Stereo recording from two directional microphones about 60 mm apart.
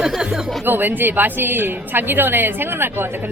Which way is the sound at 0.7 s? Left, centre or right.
Right.